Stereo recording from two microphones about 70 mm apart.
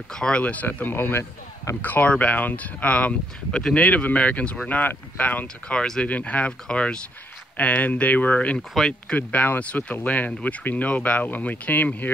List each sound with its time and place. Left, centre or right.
0.1 s speech: centre
5.8 s speech: centre
6.0 s speech: left
8.8 s speech: centre
9.1 s speech: left